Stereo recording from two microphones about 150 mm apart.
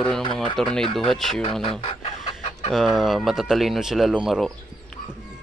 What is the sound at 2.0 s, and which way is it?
Chicken, 45° left (ahead or behind).